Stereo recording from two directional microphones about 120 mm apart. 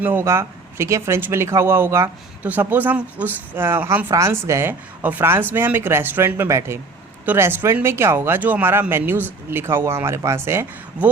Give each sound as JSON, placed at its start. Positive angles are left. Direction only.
{"t": 0.0, "sound": "speech", "side_deg": -20}